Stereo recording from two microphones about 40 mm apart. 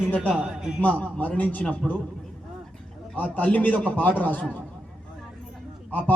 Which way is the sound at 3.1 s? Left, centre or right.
Left.